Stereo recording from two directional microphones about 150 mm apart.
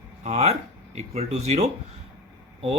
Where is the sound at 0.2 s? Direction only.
45° right (ahead or behind).